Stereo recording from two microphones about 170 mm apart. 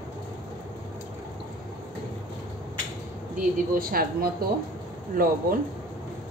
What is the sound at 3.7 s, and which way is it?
Speech, 60° right (ahead or behind).